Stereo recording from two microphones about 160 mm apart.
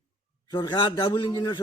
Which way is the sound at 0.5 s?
25° left (ahead or behind).